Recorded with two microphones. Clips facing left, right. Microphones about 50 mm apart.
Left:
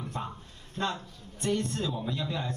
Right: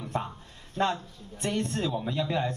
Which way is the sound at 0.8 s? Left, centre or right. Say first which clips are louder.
Right 5 dB; right.